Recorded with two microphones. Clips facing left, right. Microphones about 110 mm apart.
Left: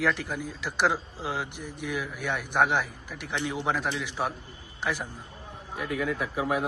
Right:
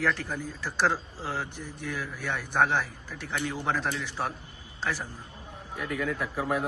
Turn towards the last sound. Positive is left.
turn(degrees=10)  # may be behind; listen again after turning